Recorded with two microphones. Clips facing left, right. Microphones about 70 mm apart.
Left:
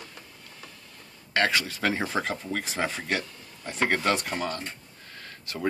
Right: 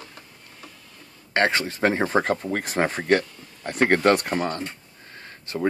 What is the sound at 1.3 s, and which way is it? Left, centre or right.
Speech, right.